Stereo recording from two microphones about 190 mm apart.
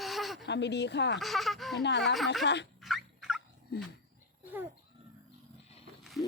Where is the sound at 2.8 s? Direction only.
Centre (ahead or behind).